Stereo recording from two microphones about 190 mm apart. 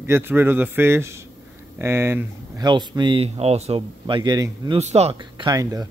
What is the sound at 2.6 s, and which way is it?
Speech, 25° right (ahead or behind).